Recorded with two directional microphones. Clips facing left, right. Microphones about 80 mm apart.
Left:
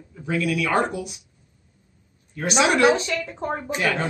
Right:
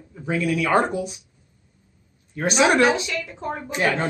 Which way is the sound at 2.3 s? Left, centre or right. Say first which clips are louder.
Right 2 dB; right.